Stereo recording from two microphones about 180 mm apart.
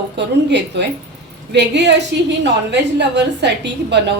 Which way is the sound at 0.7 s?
70° right (ahead or behind).